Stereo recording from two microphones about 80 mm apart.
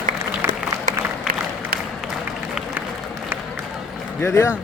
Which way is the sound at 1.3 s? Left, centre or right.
Centre.